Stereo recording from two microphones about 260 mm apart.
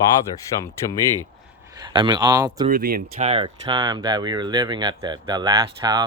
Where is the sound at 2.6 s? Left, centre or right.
Right.